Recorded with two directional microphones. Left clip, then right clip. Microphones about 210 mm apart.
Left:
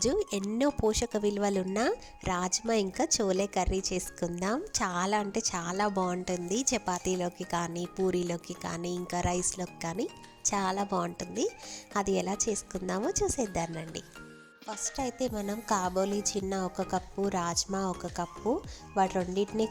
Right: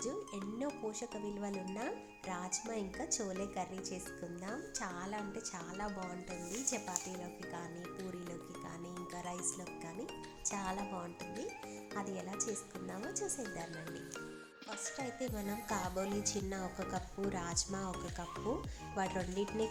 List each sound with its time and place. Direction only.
0.0 s speech: 45° left (ahead or behind)